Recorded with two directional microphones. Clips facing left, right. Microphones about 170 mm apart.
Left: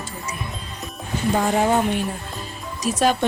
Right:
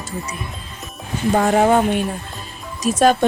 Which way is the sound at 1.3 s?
55° right (ahead or behind).